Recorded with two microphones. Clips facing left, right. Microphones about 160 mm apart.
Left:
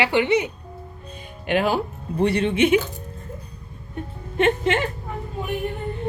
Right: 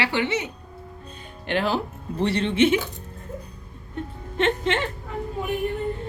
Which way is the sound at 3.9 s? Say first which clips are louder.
Left 3 dB; 10° left (ahead or behind).